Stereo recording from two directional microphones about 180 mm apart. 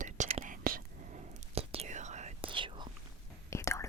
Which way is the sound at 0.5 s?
50° right (ahead or behind).